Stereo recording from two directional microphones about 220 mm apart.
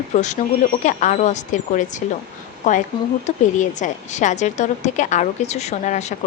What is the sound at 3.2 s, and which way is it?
Speech, 35° left (ahead or behind).